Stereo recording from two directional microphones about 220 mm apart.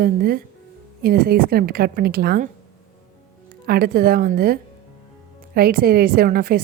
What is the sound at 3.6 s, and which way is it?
A woman's voice, 45° right (ahead or behind).